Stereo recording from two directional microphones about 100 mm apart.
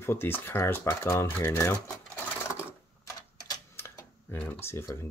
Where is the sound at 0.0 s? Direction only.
25° left (ahead or behind).